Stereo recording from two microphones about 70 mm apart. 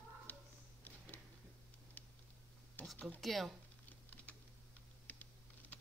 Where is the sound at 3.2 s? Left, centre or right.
Centre.